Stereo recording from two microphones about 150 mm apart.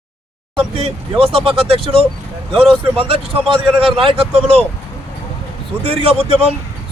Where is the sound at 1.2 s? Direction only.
35° right (ahead or behind).